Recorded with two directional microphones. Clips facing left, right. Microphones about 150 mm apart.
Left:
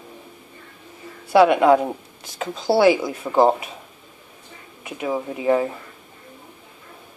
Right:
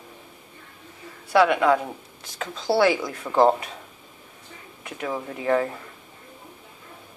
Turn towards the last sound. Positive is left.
turn(degrees=10)  # may be behind; listen again after turning